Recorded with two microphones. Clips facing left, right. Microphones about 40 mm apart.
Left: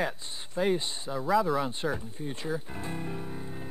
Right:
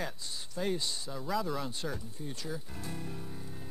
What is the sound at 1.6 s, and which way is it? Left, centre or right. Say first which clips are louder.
Speech: left 7 dB; left.